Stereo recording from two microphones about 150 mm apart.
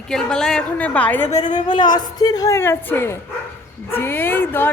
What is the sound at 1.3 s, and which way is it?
Speech, 55° left (ahead or behind).